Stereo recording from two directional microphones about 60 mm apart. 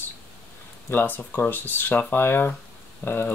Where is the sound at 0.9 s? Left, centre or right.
Left.